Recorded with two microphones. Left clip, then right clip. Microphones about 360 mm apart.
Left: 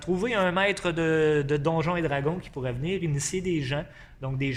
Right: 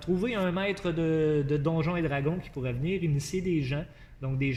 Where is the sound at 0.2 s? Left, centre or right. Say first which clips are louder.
Left 6 dB; left.